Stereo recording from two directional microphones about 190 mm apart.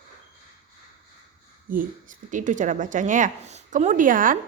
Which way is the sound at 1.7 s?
45° right (ahead or behind).